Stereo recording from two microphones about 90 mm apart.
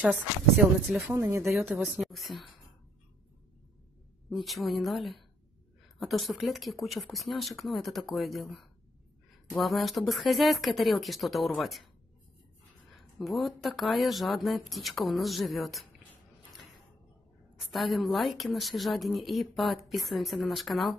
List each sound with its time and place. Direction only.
0.6 s speech: centre (ahead or behind)
1.1 s speech: 25° right (ahead or behind)
1.8 s speech: centre (ahead or behind)
4.3 s speech: centre (ahead or behind)
12.9 s speech: centre (ahead or behind)
17.6 s speech: centre (ahead or behind)